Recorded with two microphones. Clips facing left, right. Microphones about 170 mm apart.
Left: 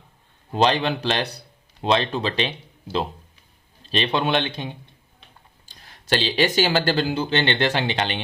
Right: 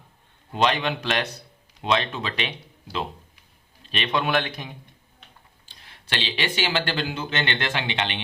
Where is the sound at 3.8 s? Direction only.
35° left (ahead or behind).